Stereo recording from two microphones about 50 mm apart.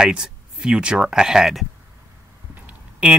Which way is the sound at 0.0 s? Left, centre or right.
Centre.